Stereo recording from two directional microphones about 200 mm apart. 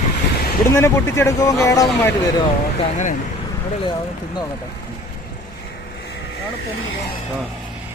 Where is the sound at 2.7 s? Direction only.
40° left (ahead or behind).